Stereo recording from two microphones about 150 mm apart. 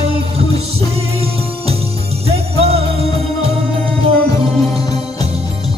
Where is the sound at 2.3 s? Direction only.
40° right (ahead or behind).